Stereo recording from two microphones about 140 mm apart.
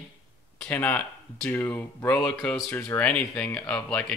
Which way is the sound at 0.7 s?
15° left (ahead or behind).